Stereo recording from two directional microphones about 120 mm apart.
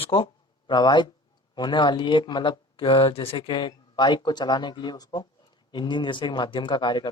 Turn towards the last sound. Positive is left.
turn(degrees=40)  # may be behind; listen again after turning